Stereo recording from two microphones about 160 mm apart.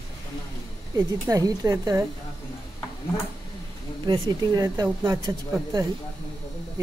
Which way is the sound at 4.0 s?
25° right (ahead or behind).